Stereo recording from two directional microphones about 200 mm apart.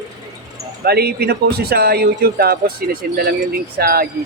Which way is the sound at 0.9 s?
50° right (ahead or behind).